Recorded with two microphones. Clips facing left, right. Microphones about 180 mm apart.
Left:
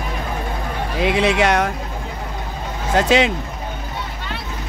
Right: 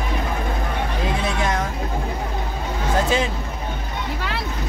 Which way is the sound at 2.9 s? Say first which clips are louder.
Left 5 dB; 85° left.